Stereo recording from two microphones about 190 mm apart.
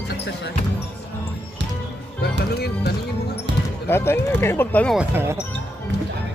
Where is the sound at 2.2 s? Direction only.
55° left (ahead or behind).